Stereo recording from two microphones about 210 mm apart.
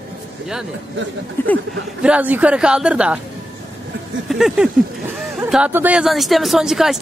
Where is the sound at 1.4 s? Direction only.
10° left (ahead or behind).